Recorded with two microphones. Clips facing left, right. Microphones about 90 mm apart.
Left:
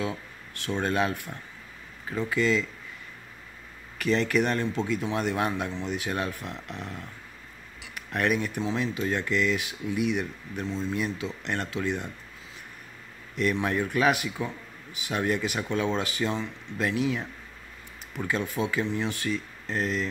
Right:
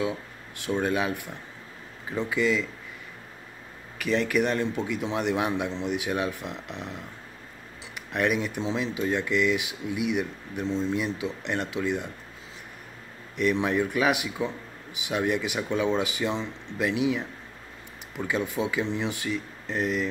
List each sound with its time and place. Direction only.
0.6 s speech: 10° right (ahead or behind)
4.0 s speech: 10° right (ahead or behind)
13.4 s speech: 15° right (ahead or behind)